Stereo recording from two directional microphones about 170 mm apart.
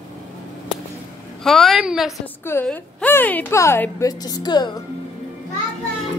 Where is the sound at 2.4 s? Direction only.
10° left (ahead or behind).